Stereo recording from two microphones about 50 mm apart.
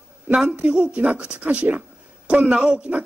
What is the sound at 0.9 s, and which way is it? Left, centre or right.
A man's voice, right.